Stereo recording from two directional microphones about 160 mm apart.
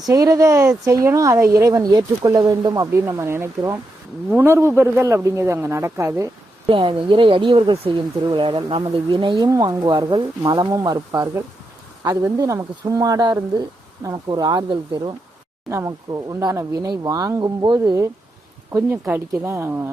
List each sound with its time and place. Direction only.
0.0 s a man's voice: 20° right (ahead or behind)
6.7 s a man's voice: 30° right (ahead or behind); by 19.9 s 15° right (ahead or behind)